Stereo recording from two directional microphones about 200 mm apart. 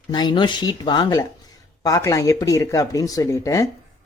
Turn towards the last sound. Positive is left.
turn(degrees=15)  # may be behind; listen again after turning